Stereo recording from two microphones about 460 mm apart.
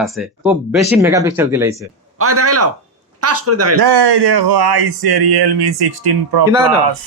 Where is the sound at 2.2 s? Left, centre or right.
Right.